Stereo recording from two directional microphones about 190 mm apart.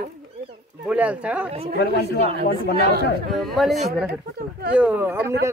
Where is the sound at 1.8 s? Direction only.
60° left (ahead or behind).